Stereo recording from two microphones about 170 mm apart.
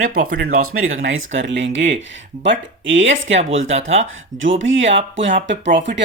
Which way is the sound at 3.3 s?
40° right (ahead or behind).